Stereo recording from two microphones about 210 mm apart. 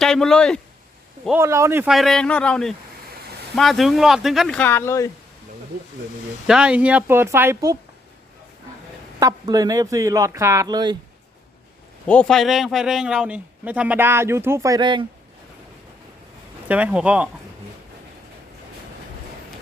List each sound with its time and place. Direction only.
0.0 s a man's voice: centre (ahead or behind)
1.4 s speech: 15° right (ahead or behind); by 5.0 s 10° left (ahead or behind)
6.5 s a man's voice: 5° right (ahead or behind)
9.2 s a man's voice: 15° right (ahead or behind)
12.0 s a man's voice: 5° left (ahead or behind); by 15.0 s 20° right (ahead or behind)
16.6 s speech: 5° right (ahead or behind)